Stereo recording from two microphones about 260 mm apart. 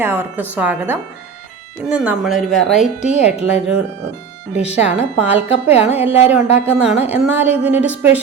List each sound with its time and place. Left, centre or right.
0.0 s a woman's voice: centre
3.0 s speech: left
4.8 s a woman's voice: centre